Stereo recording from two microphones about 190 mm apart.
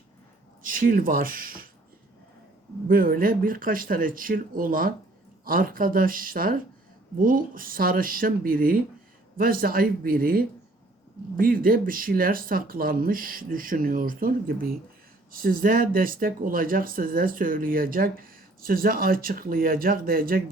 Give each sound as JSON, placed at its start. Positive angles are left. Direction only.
{"t": 0.6, "sound": "speech", "side_deg": -45}
{"t": 2.8, "sound": "speech", "side_deg": -50}